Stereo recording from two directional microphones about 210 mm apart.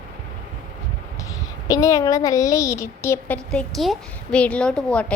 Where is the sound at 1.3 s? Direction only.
15° left (ahead or behind).